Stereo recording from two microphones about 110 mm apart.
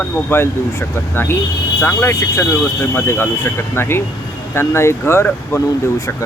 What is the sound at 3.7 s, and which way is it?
Speech, 20° left (ahead or behind).